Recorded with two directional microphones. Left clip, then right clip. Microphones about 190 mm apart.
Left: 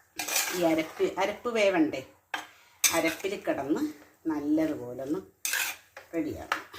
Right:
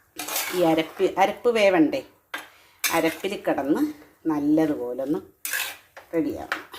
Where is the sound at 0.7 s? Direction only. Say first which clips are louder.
Right 7 dB; 60° right (ahead or behind).